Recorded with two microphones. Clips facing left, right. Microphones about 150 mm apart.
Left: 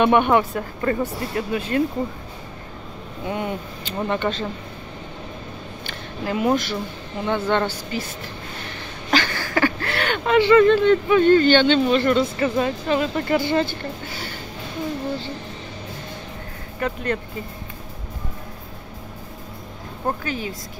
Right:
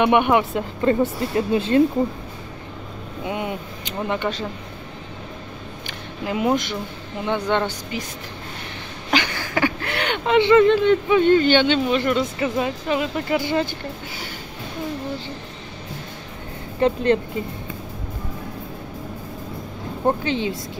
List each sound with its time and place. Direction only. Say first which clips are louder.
0.0 s speech: even; 15° right (ahead or behind)
3.3 s speech: left 1 dB; 15° right (ahead or behind)
5.9 s a sound: left 1 dB; 15° right (ahead or behind)
7.2 s speech: even; 15° right (ahead or behind)
9.1 s speech: left 1 dB; 15° right (ahead or behind)
16.8 s speech: right 7 dB; 25° right (ahead or behind)
20.1 s speech: right 5 dB; 25° right (ahead or behind)